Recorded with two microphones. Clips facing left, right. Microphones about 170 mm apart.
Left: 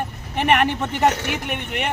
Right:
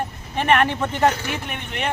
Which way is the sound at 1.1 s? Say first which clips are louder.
Left 2 dB; 70° left (ahead or behind).